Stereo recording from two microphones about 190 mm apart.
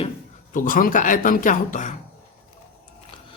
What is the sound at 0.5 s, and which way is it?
A man's voice, 45° left (ahead or behind).